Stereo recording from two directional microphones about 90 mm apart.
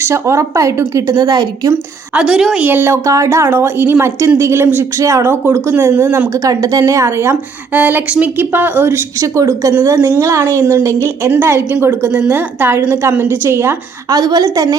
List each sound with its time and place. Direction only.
0.0 s a woman's voice: 30° right (ahead or behind); by 1.7 s 45° right (ahead or behind)
2.1 s a woman's voice: 5° right (ahead or behind)
2.6 s a woman's voice: 20° right (ahead or behind)
5.0 s a woman's voice: 35° right (ahead or behind)
7.7 s a woman's voice: 20° right (ahead or behind)
9.1 s a woman's voice: 35° right (ahead or behind)
14.1 s a woman's voice: 50° right (ahead or behind)